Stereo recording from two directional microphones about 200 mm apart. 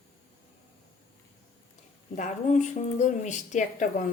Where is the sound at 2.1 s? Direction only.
35° left (ahead or behind).